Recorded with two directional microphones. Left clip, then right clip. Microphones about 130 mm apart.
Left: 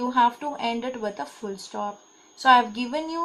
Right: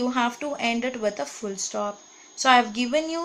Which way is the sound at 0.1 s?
10° right (ahead or behind).